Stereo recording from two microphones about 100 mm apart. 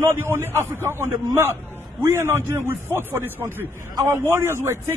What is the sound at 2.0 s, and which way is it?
A man's voice, 25° right (ahead or behind).